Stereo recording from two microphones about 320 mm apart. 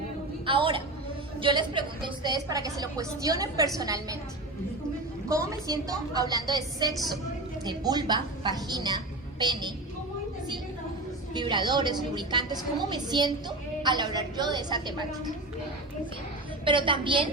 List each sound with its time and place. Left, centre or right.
0.4 s a woman's voice: centre
5.3 s a woman's voice: centre
11.3 s a woman's voice: centre
16.6 s a woman's voice: centre